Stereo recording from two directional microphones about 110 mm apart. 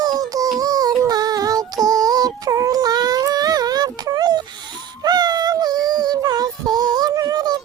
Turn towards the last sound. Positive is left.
turn(degrees=-35)  # may be behind; listen again after turning